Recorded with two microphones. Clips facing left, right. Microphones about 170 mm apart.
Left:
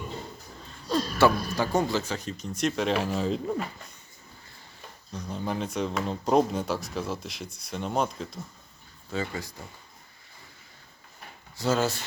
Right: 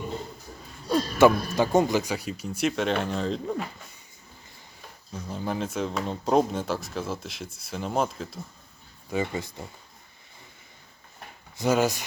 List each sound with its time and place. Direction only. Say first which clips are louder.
0.9 s speech: right 3 dB; 20° right (ahead or behind); by 3.6 s 5° left (ahead or behind)
5.1 s speech: right 1 dB; centre (ahead or behind)
9.0 s speech: right 4 dB; 20° right (ahead or behind)
11.5 s speech: right 3 dB; 15° right (ahead or behind)